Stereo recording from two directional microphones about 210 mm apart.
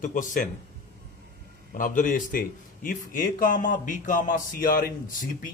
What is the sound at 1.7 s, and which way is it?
A man's voice, 40° left (ahead or behind).